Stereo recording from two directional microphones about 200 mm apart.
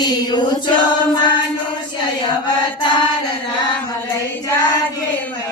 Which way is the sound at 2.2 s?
20° left (ahead or behind).